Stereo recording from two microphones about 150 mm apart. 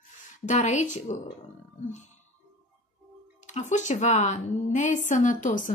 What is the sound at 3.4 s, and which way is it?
A woman's voice, 55° left (ahead or behind).